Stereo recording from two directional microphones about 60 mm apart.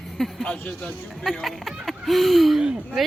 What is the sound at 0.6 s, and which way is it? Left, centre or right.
Speech, left.